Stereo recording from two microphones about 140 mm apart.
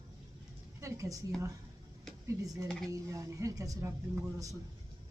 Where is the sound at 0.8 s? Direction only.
25° right (ahead or behind).